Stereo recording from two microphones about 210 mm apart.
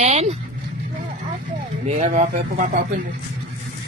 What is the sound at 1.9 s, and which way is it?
Speech, 35° right (ahead or behind).